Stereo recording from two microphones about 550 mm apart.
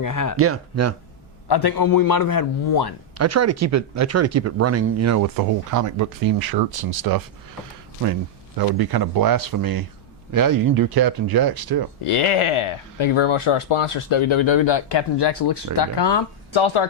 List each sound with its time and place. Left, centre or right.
0.0 s a man's voice: left
0.3 s speech: right
1.5 s a man's voice: left
3.2 s speech: right
8.5 s speech: right
12.0 s speech: left